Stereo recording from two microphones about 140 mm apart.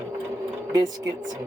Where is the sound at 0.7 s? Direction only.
25° right (ahead or behind).